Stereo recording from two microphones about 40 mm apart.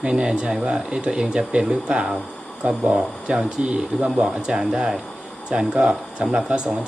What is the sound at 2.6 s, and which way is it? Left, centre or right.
Speech, right.